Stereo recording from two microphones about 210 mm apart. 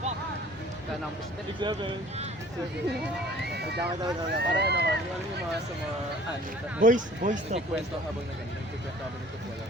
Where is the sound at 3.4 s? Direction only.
50° right (ahead or behind).